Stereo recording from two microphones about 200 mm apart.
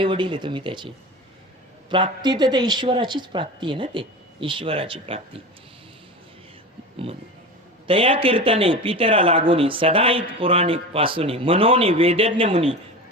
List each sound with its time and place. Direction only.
0.0 s a man's voice: 25° right (ahead or behind)
7.9 s a man's voice: 25° right (ahead or behind)